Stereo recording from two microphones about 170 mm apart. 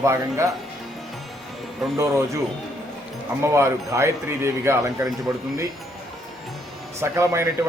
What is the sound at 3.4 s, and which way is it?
A man's voice, 15° right (ahead or behind).